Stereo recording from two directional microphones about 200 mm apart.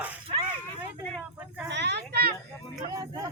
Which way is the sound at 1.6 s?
60° right (ahead or behind).